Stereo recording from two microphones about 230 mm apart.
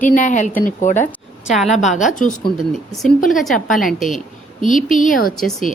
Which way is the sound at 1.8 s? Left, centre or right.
Left.